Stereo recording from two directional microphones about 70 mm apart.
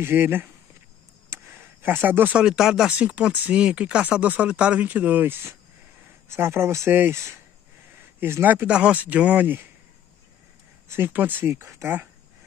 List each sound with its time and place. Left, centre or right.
0.0 s speech: right
1.3 s a sound: right
2.3 s speech: centre; by 6.9 s right
6.9 s speech: right
8.2 s speech: right
8.6 s speech: centre
11.1 s speech: right